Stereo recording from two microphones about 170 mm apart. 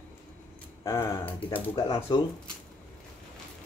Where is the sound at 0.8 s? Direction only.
15° left (ahead or behind).